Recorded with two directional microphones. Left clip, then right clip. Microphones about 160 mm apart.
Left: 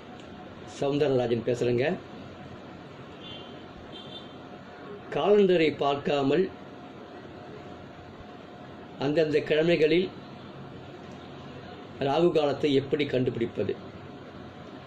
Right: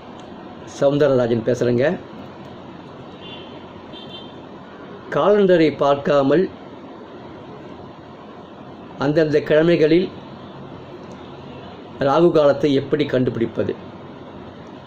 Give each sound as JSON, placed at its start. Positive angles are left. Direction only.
{"t": 0.7, "sound": "speech", "side_deg": -40}
{"t": 5.1, "sound": "speech", "side_deg": -40}
{"t": 8.9, "sound": "speech", "side_deg": -40}
{"t": 12.0, "sound": "speech", "side_deg": -40}